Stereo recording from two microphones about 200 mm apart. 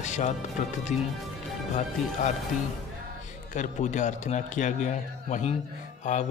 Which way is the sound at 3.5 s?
40° left (ahead or behind).